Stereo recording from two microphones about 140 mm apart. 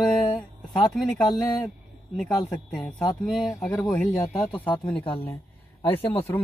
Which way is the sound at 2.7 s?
5° left (ahead or behind).